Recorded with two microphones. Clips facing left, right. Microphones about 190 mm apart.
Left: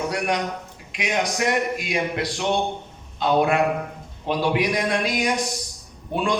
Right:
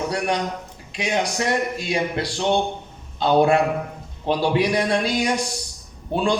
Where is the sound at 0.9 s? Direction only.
30° right (ahead or behind).